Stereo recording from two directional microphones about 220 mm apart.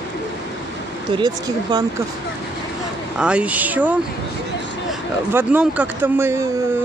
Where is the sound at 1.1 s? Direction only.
20° right (ahead or behind).